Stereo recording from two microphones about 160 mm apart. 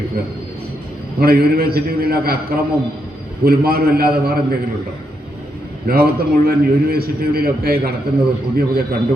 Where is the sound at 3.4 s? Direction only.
70° right (ahead or behind).